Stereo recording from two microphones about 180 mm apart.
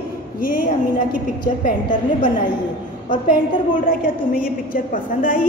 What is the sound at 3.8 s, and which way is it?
A woman's voice, 50° left (ahead or behind).